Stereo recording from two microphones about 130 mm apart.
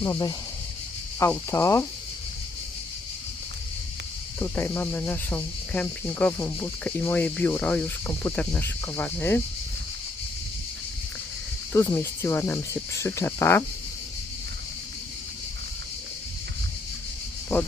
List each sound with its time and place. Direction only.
1.2 s cricket: 20° left (ahead or behind)
4.4 s speech: 15° left (ahead or behind)
11.7 s cricket: 20° left (ahead or behind)
17.5 s speech: 15° left (ahead or behind)